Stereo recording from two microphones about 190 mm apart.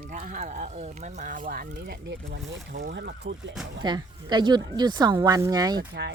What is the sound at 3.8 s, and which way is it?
Speech, 20° right (ahead or behind).